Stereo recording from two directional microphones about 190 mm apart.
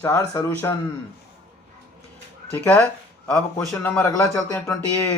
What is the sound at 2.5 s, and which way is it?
A man's voice, 10° left (ahead or behind).